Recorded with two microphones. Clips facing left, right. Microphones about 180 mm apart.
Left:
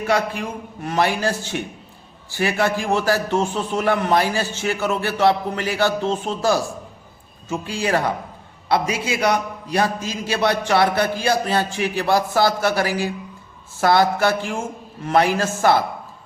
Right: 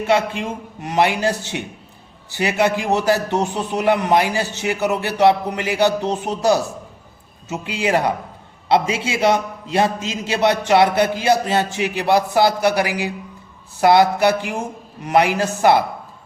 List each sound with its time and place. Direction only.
0.0 s a man's voice: 25° right (ahead or behind)